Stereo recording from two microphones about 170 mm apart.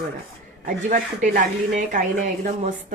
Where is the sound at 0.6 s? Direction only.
55° right (ahead or behind).